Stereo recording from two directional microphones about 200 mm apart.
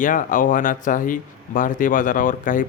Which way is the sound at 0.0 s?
40° left (ahead or behind).